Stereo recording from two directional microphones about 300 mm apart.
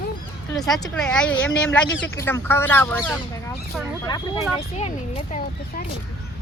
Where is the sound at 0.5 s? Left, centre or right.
Centre; by 5.8 s left.